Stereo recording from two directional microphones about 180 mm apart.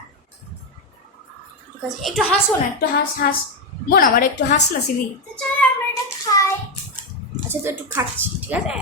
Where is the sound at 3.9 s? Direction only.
50° left (ahead or behind).